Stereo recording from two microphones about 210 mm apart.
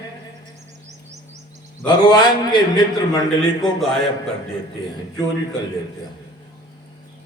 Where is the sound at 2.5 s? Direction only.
20° left (ahead or behind).